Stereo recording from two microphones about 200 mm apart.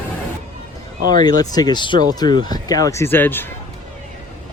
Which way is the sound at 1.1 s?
20° left (ahead or behind).